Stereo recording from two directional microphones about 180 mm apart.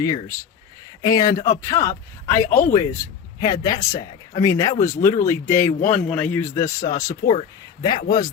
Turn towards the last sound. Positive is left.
turn(degrees=20)  # may be behind; listen again after turning